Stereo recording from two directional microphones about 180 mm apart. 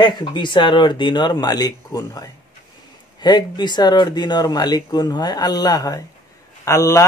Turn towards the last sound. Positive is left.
turn(degrees=15)  # may be behind; listen again after turning